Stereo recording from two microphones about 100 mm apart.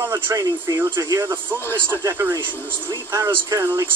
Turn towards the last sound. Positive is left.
turn(degrees=-25)  # may be behind; listen again after turning